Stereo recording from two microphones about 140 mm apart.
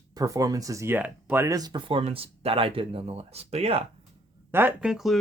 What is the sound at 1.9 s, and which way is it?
Speech, 45° right (ahead or behind).